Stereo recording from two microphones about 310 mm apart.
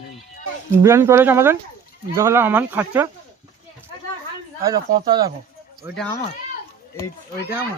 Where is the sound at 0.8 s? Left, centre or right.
Centre.